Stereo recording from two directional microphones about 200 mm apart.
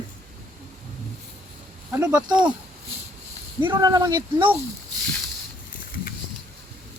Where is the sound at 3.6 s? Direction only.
20° right (ahead or behind).